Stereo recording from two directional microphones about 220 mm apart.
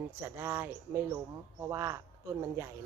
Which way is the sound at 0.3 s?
10° right (ahead or behind).